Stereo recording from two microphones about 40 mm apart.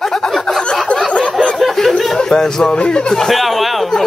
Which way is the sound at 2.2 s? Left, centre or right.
Centre.